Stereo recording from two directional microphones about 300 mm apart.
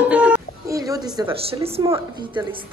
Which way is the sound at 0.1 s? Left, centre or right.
Centre.